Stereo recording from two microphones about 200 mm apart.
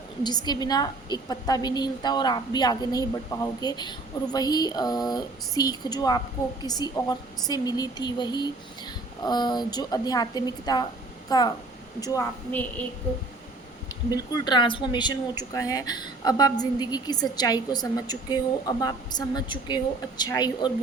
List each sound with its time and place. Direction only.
0.2 s a woman's voice: 20° left (ahead or behind)
14.1 s a woman's voice: 20° left (ahead or behind)